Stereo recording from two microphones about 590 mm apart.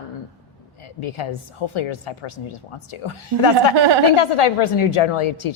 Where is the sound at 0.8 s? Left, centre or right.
Left.